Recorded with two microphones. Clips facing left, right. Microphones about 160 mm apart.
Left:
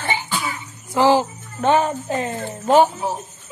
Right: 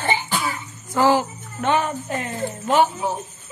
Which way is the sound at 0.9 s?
25° left (ahead or behind).